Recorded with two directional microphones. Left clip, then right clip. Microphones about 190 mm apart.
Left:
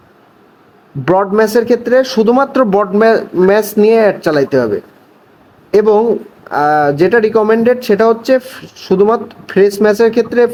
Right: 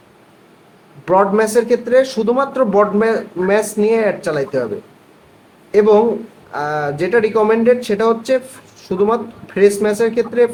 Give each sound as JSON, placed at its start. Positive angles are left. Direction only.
{"t": 1.0, "sound": "speech", "side_deg": 50}
{"t": 5.7, "sound": "speech", "side_deg": 50}